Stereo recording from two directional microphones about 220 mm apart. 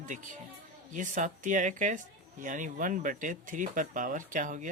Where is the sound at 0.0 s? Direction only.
35° right (ahead or behind).